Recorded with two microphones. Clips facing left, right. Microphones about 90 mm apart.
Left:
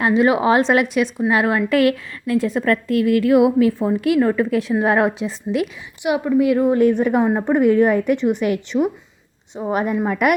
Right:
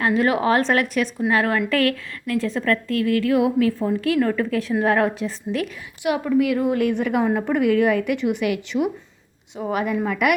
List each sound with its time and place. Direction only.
0.0 s a woman's voice: 20° left (ahead or behind); by 10.3 s 40° left (ahead or behind)